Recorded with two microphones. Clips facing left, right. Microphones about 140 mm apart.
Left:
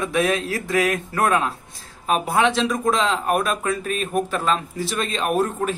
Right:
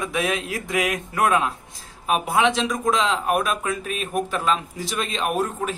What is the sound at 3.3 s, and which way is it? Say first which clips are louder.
A man's voice: left 1 dB; 10° right (ahead or behind).